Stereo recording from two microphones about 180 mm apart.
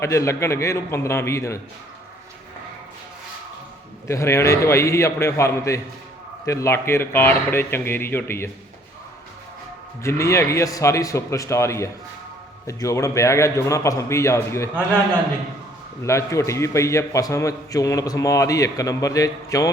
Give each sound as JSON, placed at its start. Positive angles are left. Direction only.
{"t": 0.0, "sound": "a man's voice", "side_deg": 15}
{"t": 4.1, "sound": "a man's voice", "side_deg": 15}
{"t": 10.0, "sound": "a man's voice", "side_deg": 15}
{"t": 16.0, "sound": "a man's voice", "side_deg": 15}